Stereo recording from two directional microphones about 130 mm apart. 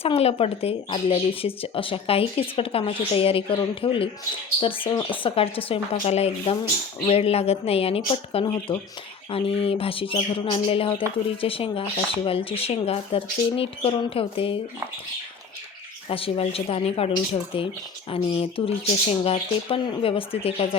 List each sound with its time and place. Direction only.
0.0 s speech: 50° left (ahead or behind)
16.0 s speech: 45° left (ahead or behind)
18.1 s speech: 45° left (ahead or behind)